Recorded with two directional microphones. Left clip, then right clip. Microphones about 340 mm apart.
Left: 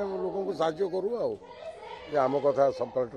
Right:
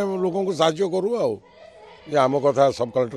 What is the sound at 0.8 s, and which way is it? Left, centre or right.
A man's voice, right.